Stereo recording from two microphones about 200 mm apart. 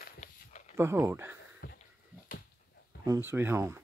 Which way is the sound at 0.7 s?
10° right (ahead or behind).